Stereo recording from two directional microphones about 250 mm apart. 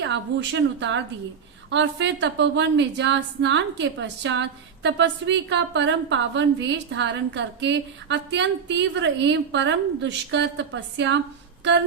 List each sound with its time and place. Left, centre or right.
0.0 s a woman's voice: right